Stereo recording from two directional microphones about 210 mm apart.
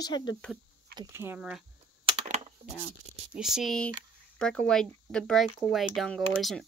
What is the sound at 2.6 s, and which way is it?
Chopping, 30° right (ahead or behind).